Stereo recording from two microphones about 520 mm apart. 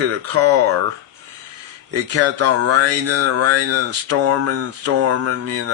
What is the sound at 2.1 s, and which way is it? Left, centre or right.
Speech, right.